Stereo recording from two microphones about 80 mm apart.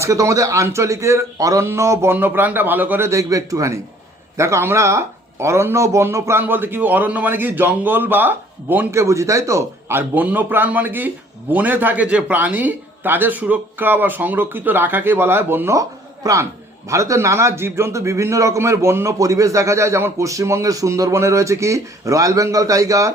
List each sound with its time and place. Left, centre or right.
0.0 s a man's voice: right
2.1 s a man's voice: right
3.1 s a man's voice: right
8.9 s a man's voice: right
10.0 s a man's voice: right